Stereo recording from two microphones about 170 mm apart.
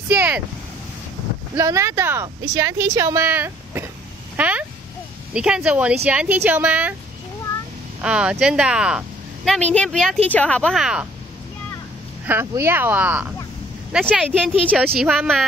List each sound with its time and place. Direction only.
0.1 s vehicle: 10° right (ahead or behind)
1.6 s speech: 15° right (ahead or behind)
8.0 s speech: 5° right (ahead or behind)
12.3 s speech: 15° right (ahead or behind)